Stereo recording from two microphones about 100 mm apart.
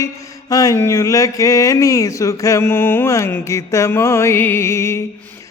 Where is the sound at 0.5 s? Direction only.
35° left (ahead or behind).